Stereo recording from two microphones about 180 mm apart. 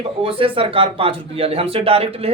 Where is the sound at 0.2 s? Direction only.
30° right (ahead or behind).